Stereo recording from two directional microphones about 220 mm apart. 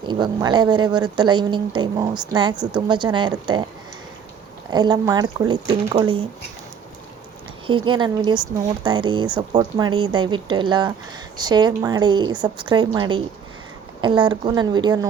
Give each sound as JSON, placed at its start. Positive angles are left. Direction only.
{"t": 0.0, "sound": "speech", "side_deg": -20}
{"t": 4.7, "sound": "speech", "side_deg": -20}
{"t": 7.7, "sound": "speech", "side_deg": -20}